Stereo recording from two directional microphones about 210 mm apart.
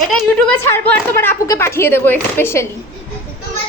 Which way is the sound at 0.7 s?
10° left (ahead or behind).